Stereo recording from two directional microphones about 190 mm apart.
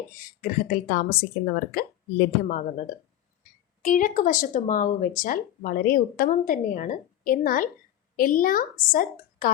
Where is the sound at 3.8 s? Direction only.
45° left (ahead or behind).